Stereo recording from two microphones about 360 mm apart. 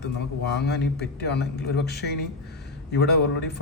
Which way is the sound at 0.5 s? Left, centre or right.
Left.